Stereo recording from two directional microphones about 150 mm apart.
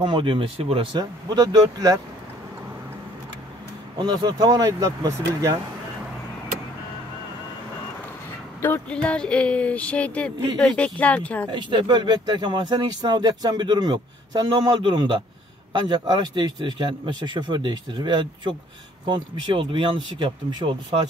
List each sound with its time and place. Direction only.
0.0 s speech: 30° right (ahead or behind)
4.0 s speech: 30° right (ahead or behind)
8.5 s speech: 15° left (ahead or behind)
11.5 s a man's voice: 30° right (ahead or behind)